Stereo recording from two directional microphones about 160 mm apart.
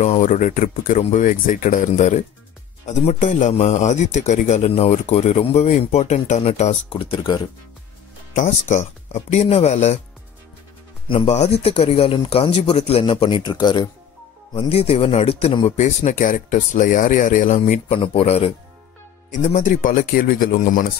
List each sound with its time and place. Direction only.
0.0 s a man's voice: 50° left (ahead or behind); by 7.4 s 30° left (ahead or behind)
8.5 s speech: 45° left (ahead or behind)
11.1 s a man's voice: 45° left (ahead or behind); by 13.8 s 25° left (ahead or behind)
14.5 s a man's voice: 35° left (ahead or behind)
19.3 s speech: 50° left (ahead or behind)